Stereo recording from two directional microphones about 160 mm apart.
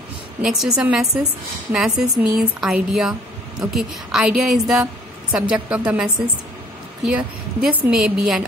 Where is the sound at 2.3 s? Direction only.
5° right (ahead or behind).